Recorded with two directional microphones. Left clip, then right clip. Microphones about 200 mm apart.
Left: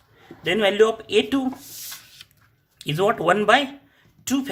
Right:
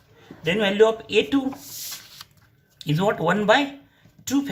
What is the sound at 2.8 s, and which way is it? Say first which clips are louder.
Speech: left 2 dB; 45° left (ahead or behind).